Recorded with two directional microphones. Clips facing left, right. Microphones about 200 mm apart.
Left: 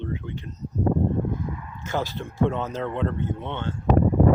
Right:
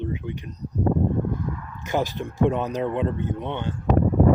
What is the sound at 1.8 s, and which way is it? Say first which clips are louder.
Speech: right 3 dB; 15° right (ahead or behind).